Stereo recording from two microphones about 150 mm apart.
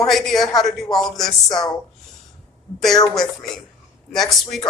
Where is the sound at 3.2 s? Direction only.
Centre (ahead or behind).